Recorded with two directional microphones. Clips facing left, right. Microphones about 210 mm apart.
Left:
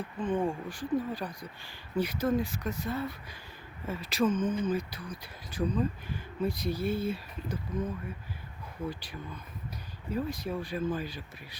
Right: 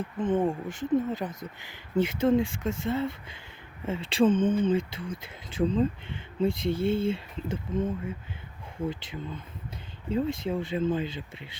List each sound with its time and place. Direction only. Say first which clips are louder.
0.0 s speech: right 4 dB; 20° right (ahead or behind)